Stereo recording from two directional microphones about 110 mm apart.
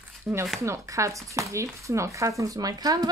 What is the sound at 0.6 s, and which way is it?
Speech, 30° right (ahead or behind).